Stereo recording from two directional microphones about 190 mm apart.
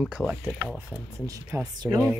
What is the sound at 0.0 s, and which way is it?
Speech, centre (ahead or behind).